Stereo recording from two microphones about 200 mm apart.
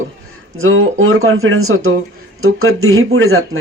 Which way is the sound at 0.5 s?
85° right.